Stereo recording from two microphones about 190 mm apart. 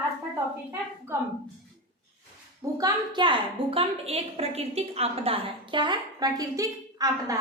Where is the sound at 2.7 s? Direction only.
20° right (ahead or behind).